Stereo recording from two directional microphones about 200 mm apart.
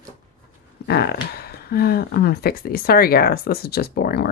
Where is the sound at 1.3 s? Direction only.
50° left (ahead or behind).